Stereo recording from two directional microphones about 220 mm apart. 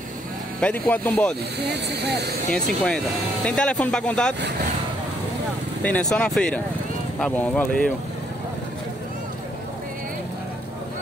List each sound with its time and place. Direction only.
0.6 s speech: 5° left (ahead or behind)
1.7 s speech: 50° right (ahead or behind)
2.5 s speech: 5° left (ahead or behind)
5.8 s speech: 5° left (ahead or behind)